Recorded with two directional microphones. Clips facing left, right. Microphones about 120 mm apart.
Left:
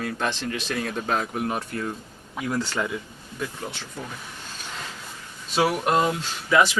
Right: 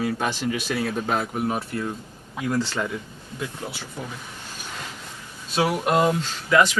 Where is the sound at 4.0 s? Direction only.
15° right (ahead or behind).